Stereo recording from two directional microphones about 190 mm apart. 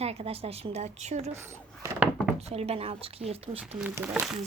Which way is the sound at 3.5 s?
10° right (ahead or behind).